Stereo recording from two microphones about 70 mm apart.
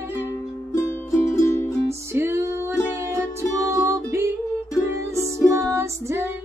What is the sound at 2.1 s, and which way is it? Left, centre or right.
Music, right.